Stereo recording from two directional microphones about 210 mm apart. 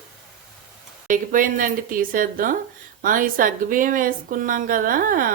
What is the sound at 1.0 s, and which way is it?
Speech, 40° right (ahead or behind).